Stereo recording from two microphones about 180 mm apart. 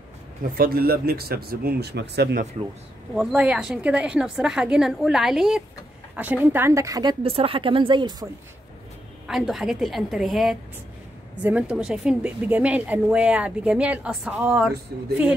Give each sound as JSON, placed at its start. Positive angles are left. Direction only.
{"t": 0.4, "sound": "speech", "side_deg": -55}
{"t": 3.2, "sound": "a woman's voice", "side_deg": -5}
{"t": 9.3, "sound": "a woman's voice", "side_deg": 0}